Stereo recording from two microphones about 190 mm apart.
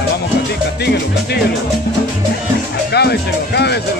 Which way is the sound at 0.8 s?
60° left (ahead or behind).